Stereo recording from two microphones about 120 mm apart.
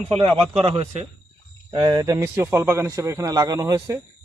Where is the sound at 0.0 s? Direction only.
55° right (ahead or behind).